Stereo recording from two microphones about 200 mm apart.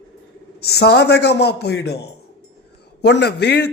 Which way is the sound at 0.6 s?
55° left (ahead or behind).